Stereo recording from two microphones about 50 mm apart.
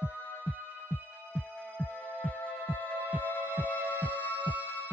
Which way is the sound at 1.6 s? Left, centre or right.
Left.